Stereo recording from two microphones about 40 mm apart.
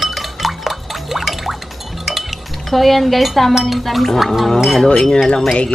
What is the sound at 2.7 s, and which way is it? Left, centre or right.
Speech, centre.